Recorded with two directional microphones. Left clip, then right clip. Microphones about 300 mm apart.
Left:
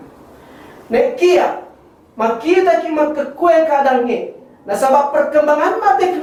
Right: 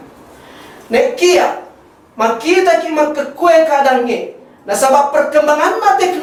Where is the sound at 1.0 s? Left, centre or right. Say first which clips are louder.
Right 2 dB; centre.